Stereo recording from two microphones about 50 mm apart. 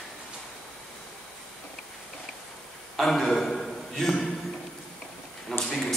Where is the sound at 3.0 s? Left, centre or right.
Centre.